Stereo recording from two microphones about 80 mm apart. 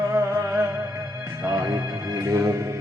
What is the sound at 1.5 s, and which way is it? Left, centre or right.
Music, right.